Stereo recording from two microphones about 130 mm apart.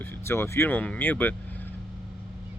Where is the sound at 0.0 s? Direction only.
20° left (ahead or behind).